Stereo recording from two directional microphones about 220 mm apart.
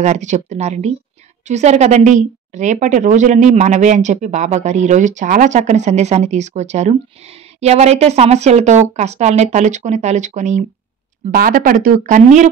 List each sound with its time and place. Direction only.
0.0 s speech: 30° right (ahead or behind)